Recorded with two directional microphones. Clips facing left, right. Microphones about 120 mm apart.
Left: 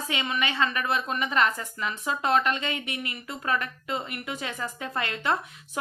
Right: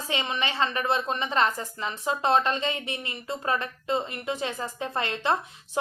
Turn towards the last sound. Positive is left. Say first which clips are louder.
# right 1 dB
turn(degrees=-25)  # may be behind; listen again after turning